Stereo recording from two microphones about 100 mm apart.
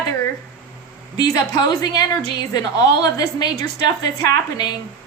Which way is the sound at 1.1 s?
40° left (ahead or behind).